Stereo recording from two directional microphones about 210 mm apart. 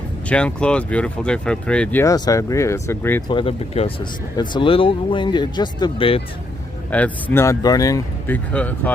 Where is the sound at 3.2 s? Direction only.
25° left (ahead or behind).